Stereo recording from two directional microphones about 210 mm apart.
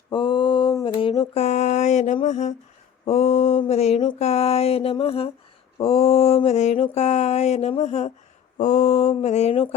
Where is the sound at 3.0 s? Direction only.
30° left (ahead or behind).